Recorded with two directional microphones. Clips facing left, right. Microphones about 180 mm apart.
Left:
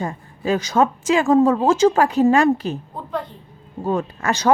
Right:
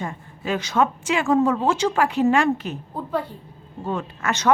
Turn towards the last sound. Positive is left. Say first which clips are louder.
# left 3 dB
turn(degrees=35)  # may be behind; listen again after turning